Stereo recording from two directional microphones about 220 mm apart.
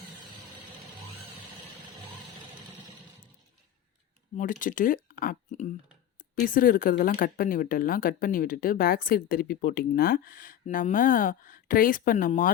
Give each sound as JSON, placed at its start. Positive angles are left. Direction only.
{"t": 4.4, "sound": "speech", "side_deg": 35}